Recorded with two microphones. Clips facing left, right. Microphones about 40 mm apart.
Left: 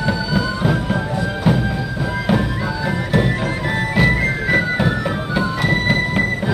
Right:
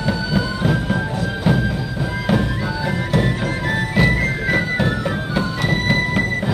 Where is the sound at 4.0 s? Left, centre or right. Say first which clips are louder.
Left 1 dB; centre.